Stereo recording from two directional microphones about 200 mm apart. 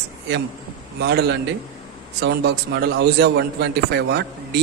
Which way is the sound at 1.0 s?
55° right (ahead or behind).